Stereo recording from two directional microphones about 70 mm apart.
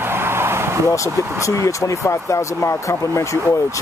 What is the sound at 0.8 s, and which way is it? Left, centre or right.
Speech, left.